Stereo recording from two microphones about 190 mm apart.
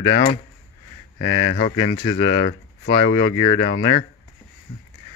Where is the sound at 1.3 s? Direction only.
25° left (ahead or behind).